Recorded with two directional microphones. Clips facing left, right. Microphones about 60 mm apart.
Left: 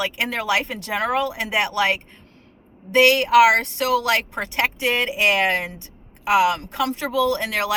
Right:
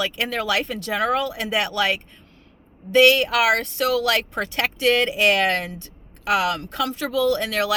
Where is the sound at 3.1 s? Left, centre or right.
Left.